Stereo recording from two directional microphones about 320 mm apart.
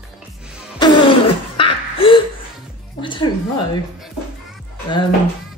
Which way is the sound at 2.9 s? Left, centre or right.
Centre.